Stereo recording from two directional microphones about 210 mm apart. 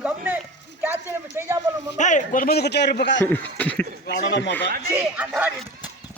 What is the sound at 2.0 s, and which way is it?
Speech, 35° left (ahead or behind).